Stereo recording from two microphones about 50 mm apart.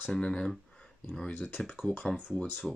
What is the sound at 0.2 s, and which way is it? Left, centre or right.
Speech, centre.